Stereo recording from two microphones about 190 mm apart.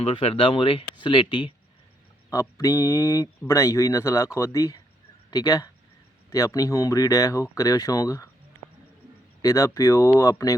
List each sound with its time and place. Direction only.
0.0 s speech: 30° left (ahead or behind)
9.4 s speech: 20° left (ahead or behind)